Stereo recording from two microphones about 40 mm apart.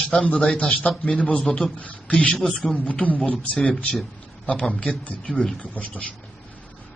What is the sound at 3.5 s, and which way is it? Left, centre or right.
Speech, centre.